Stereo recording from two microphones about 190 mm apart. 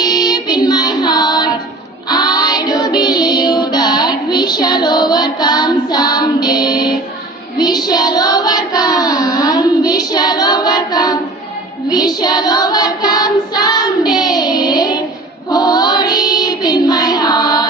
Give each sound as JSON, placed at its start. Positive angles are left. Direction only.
{"t": 0.0, "sound": "music", "side_deg": 20}
{"t": 2.0, "sound": "child singing", "side_deg": 20}